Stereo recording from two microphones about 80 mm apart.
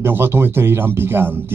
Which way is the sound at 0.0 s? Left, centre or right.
Right.